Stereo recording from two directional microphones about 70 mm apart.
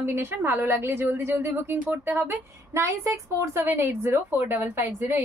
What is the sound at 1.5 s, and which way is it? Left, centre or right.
Speech, right.